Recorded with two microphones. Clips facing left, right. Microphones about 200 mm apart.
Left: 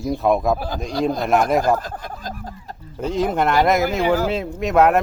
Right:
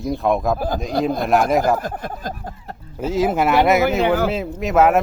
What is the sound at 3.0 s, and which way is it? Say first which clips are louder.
Speech: right 2 dB; 5° right (ahead or behind).